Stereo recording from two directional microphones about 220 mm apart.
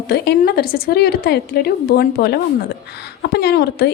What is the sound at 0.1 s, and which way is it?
A woman's voice, 45° left (ahead or behind).